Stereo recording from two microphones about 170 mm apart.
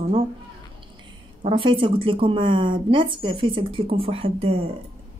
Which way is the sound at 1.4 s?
30° right (ahead or behind).